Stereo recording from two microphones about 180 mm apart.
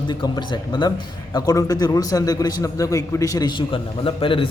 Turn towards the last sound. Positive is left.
turn(degrees=30)  # may be behind; listen again after turning